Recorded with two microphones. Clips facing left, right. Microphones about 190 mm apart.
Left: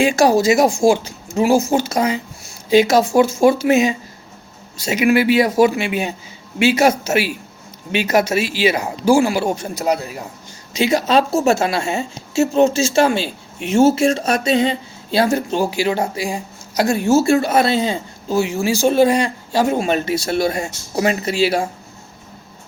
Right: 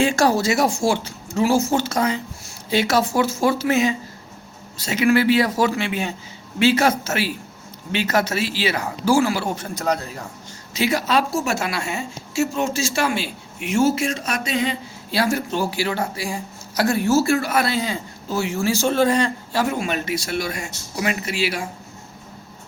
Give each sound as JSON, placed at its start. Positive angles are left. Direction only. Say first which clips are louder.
{"t": 0.0, "sound": "speech", "louder": "left 4 dB", "side_deg": 15}
{"t": 10.8, "sound": "speech", "louder": "left 5 dB", "side_deg": 20}